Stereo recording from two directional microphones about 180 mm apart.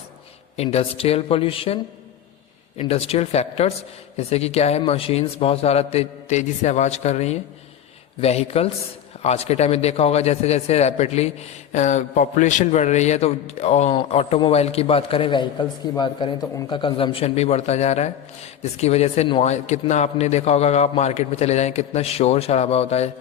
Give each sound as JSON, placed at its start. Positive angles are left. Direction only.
{"t": 0.5, "sound": "a man's voice", "side_deg": 35}